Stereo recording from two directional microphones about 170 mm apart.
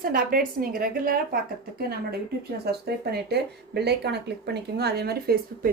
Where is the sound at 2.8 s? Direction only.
70° right (ahead or behind).